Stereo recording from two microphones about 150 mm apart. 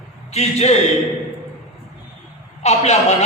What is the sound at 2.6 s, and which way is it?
Speech, 50° left (ahead or behind).